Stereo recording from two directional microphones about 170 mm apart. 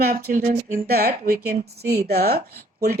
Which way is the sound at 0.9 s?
65° right (ahead or behind).